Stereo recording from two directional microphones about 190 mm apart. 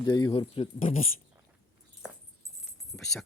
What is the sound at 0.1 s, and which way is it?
Speech, 25° left (ahead or behind).